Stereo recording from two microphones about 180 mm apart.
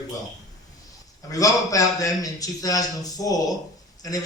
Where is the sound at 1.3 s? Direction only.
20° left (ahead or behind).